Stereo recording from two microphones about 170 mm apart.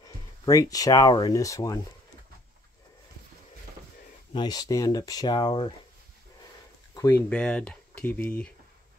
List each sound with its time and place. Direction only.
0.5 s speech: 20° left (ahead or behind)
4.3 s speech: 25° left (ahead or behind)
7.1 s speech: 10° left (ahead or behind)